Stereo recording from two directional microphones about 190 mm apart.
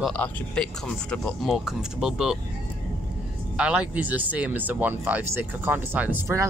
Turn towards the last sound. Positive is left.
turn(degrees=-10)  # may be behind; listen again after turning